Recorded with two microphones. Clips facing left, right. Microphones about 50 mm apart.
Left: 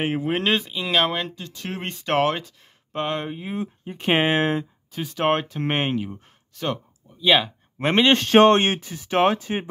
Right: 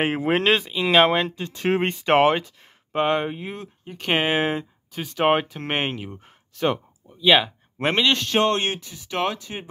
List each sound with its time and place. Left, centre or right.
0.0 s speech: right
0.4 s speech: centre
1.3 s speech: right
2.0 s speech: centre
3.5 s speech: centre
4.3 s speech: centre
8.0 s speech: left